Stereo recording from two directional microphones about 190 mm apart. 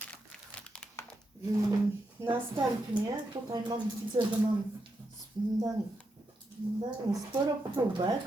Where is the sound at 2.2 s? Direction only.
15° right (ahead or behind).